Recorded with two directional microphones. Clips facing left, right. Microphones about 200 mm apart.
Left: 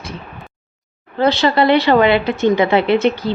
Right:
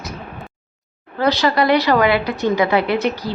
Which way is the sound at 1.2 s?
25° left (ahead or behind).